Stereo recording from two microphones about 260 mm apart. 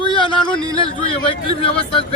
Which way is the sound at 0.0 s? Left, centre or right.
Centre.